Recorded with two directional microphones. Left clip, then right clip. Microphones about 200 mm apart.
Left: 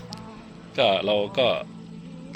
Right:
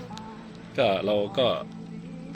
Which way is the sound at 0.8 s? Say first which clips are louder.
Left 2 dB; 10° right (ahead or behind).